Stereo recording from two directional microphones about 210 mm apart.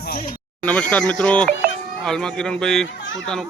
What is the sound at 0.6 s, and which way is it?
A man's voice, 5° left (ahead or behind).